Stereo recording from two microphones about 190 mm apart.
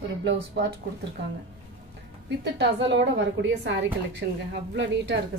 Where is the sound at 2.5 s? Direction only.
70° right (ahead or behind).